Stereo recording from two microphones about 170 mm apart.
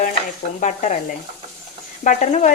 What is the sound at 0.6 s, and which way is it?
Speech, 45° left (ahead or behind).